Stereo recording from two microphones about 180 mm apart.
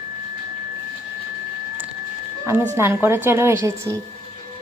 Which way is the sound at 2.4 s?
10° right (ahead or behind).